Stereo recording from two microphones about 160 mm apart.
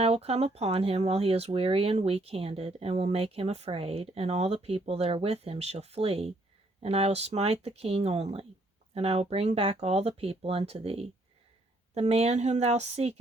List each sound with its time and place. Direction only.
0.0 s a woman's voice: 40° right (ahead or behind)